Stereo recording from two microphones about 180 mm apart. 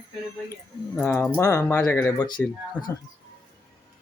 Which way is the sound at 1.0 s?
5° left (ahead or behind).